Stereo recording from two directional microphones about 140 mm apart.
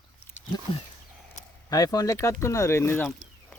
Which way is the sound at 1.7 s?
25° left (ahead or behind).